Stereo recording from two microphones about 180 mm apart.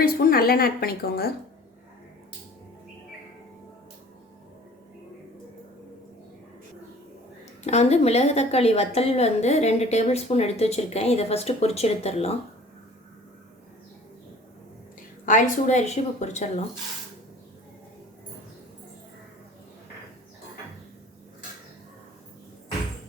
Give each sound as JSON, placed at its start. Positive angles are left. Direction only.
{"t": 0.0, "sound": "a woman's voice", "side_deg": 55}
{"t": 7.6, "sound": "a woman's voice", "side_deg": 35}
{"t": 15.3, "sound": "a woman's voice", "side_deg": 45}